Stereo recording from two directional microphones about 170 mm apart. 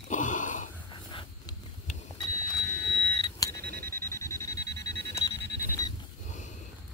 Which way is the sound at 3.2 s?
20° left (ahead or behind).